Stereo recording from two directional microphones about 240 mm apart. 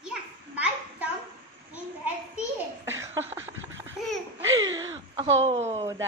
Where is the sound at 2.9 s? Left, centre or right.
Centre.